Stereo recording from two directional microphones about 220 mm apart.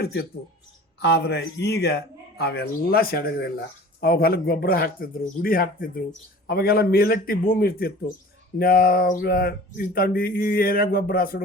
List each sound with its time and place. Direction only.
0.0 s a man's voice: 45° left (ahead or behind)